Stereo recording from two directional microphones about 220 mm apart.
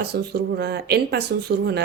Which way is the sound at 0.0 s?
50° right (ahead or behind).